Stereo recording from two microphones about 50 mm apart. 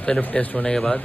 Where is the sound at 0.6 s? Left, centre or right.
Centre.